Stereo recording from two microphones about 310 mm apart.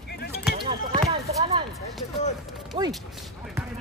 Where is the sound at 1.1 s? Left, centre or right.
Centre.